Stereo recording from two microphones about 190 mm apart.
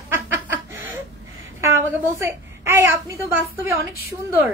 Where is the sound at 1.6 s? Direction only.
15° right (ahead or behind).